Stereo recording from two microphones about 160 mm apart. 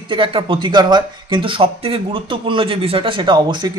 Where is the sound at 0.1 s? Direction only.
35° right (ahead or behind).